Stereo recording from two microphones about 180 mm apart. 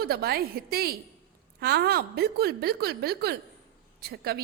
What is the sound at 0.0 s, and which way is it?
A woman's voice, 60° right (ahead or behind).